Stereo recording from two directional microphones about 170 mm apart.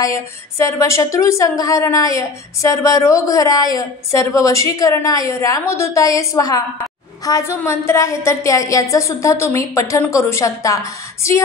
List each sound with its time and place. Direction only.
0.0 s a woman's voice: 20° left (ahead or behind)